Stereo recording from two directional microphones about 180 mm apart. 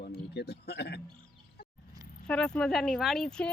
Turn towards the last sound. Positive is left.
turn(degrees=5)  # may be behind; listen again after turning